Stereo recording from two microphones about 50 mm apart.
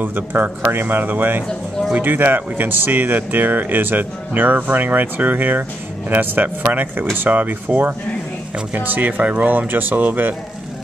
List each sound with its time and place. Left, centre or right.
0.0 s speech: right